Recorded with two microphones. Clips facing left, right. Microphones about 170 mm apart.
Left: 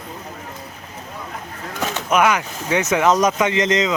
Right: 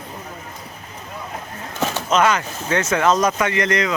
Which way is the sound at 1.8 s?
15° left (ahead or behind).